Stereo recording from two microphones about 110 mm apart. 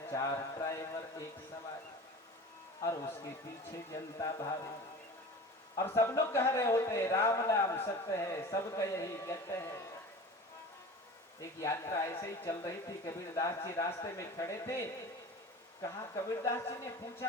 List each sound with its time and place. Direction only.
0.1 s speech: 30° left (ahead or behind)
3.9 s speech: 30° left (ahead or behind)
5.8 s speech: 25° left (ahead or behind)
11.3 s speech: 30° left (ahead or behind)